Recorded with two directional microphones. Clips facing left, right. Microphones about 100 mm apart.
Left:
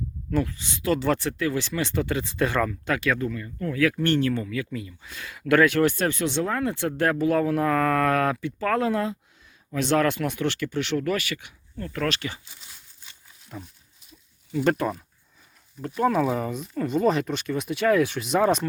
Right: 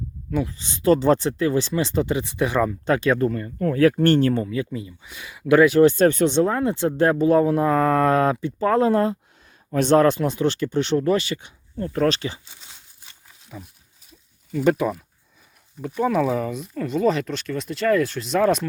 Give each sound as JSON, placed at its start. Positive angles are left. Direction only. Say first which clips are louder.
{"t": 0.4, "sound": "speech", "louder": "right 7 dB", "side_deg": -30}
{"t": 2.8, "sound": "speech", "louder": "right 6 dB", "side_deg": -30}
{"t": 5.0, "sound": "speech", "louder": "right 5 dB", "side_deg": -15}
{"t": 14.6, "sound": "speech", "louder": "right 4 dB", "side_deg": -5}